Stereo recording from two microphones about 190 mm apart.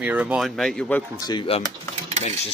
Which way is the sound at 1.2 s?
25° left (ahead or behind).